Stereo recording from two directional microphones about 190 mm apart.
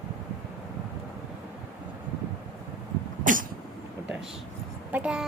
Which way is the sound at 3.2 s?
45° right (ahead or behind).